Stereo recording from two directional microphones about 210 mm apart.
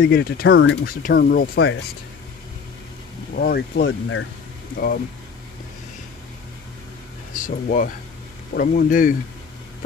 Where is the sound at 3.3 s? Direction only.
45° left (ahead or behind); by 4.2 s 65° left (ahead or behind).